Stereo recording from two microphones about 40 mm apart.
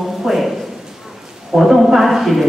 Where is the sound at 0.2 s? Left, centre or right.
Centre.